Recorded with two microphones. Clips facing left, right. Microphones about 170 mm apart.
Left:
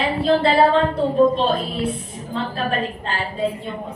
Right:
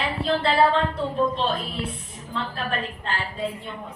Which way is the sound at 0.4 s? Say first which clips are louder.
Left 2 dB; 35° left (ahead or behind).